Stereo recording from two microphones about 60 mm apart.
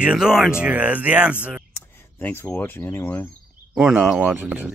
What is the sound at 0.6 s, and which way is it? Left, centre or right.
Speech, right.